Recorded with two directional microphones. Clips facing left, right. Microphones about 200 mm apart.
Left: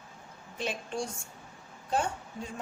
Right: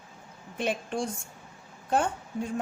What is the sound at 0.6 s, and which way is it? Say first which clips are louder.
Speech: right 4 dB; 55° right (ahead or behind).